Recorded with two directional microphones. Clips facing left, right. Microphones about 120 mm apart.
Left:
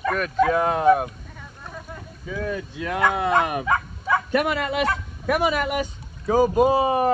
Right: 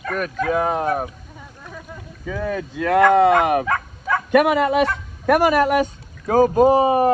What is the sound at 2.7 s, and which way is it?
Speech, 55° right (ahead or behind).